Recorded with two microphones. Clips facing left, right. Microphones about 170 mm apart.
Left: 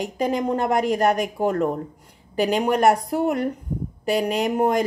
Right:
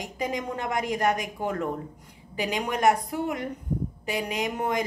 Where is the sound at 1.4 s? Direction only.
40° left (ahead or behind).